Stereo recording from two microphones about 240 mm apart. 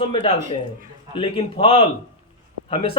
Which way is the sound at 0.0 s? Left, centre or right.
Left.